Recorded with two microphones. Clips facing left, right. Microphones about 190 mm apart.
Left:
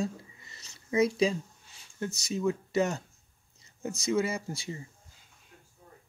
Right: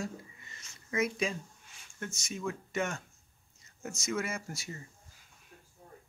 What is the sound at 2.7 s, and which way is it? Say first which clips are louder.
Speech: left 6 dB; 35° left (ahead or behind).